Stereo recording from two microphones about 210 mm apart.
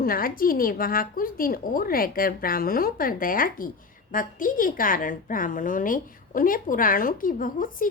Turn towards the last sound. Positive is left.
turn(degrees=40)  # may be behind; listen again after turning